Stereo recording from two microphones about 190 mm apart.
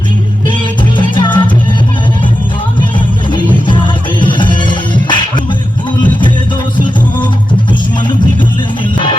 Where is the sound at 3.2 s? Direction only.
25° left (ahead or behind).